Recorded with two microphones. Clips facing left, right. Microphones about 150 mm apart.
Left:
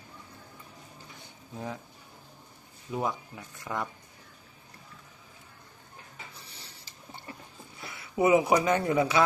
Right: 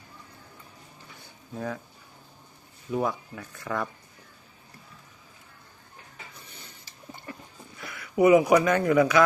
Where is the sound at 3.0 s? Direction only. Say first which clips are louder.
Right 3 dB; 20° left (ahead or behind).